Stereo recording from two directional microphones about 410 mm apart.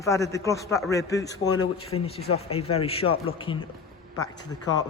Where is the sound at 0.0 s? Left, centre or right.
Centre.